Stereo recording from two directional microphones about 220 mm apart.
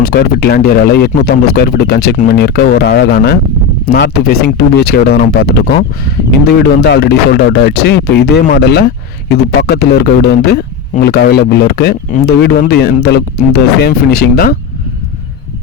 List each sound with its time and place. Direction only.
0.0 s a man's voice: 45° left (ahead or behind)